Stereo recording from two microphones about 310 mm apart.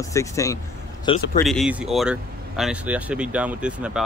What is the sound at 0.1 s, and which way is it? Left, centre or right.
Speech, centre.